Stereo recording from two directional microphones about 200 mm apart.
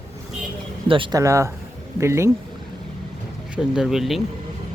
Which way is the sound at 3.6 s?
5° right (ahead or behind).